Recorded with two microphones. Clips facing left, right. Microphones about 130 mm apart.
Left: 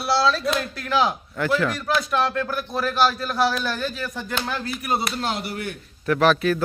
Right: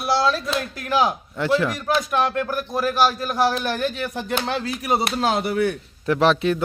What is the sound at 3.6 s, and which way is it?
Speech, 55° right (ahead or behind).